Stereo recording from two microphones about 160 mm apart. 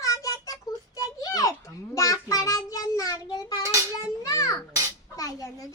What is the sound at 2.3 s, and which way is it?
A child's voice, 20° left (ahead or behind).